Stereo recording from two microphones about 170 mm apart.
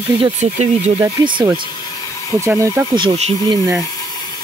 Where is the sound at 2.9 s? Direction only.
25° right (ahead or behind).